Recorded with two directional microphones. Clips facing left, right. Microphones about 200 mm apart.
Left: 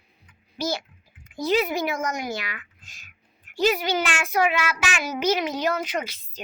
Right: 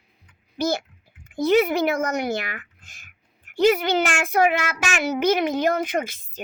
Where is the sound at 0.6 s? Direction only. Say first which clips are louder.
Right 4 dB; 50° right (ahead or behind).